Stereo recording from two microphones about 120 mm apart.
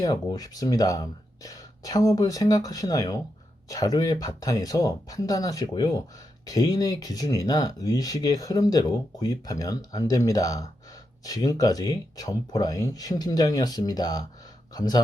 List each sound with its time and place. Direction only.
0.0 s speech: 30° left (ahead or behind)